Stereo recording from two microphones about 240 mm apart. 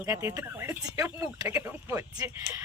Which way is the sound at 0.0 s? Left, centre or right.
Centre.